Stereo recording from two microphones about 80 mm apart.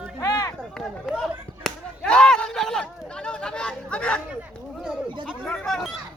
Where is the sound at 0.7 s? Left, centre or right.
Centre.